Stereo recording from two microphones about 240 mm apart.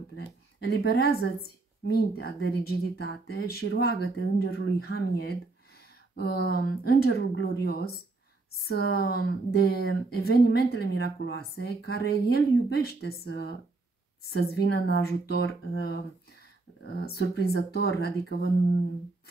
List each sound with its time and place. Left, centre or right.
0.1 s speech: left
17.0 s speech: left